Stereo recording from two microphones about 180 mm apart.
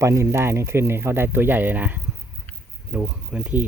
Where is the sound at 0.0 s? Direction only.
15° right (ahead or behind).